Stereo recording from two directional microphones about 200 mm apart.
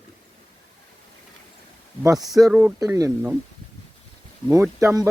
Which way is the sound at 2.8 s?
20° right (ahead or behind).